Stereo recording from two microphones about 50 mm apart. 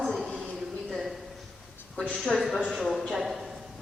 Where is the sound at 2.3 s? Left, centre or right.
Centre.